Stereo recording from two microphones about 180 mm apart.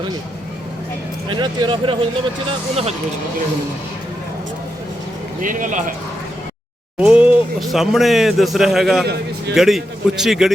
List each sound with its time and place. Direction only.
1.3 s speech: 25° right (ahead or behind)
5.4 s speech: 50° right (ahead or behind)
7.0 s speech: 5° right (ahead or behind)